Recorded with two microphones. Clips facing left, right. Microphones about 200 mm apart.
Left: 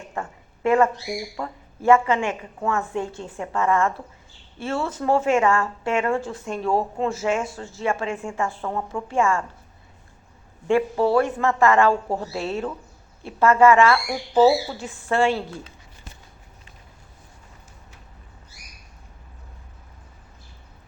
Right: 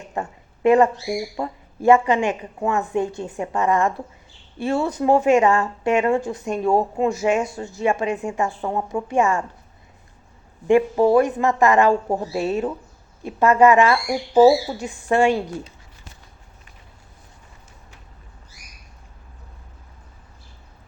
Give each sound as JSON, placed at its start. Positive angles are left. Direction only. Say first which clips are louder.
{"t": 0.1, "sound": "a sound", "louder": "right 4 dB", "side_deg": -20}
{"t": 1.4, "sound": "speech", "louder": "right 4 dB", "side_deg": -15}
{"t": 10.7, "sound": "speech", "louder": "right 4 dB", "side_deg": -15}